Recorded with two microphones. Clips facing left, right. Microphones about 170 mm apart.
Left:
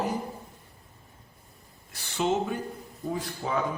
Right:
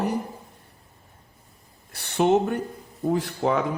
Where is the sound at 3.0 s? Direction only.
75° right (ahead or behind).